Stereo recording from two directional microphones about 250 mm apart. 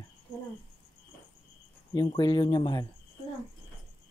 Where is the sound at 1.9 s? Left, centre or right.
Centre.